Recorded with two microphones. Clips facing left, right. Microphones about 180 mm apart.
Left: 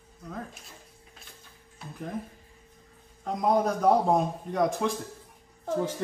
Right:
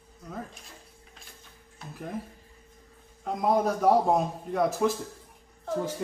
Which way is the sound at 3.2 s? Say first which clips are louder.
Even; centre (ahead or behind).